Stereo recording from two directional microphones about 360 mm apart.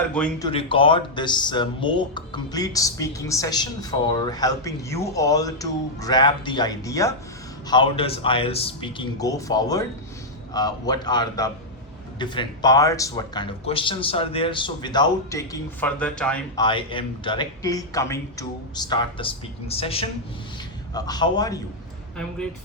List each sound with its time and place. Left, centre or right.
0.1 s speech: centre